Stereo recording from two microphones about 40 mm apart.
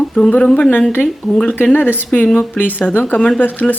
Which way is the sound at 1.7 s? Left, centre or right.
Left.